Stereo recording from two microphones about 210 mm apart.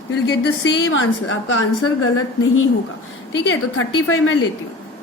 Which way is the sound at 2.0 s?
75° left (ahead or behind).